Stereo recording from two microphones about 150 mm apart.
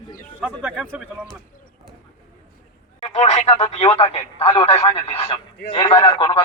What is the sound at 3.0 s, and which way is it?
A man's voice, 50° left (ahead or behind).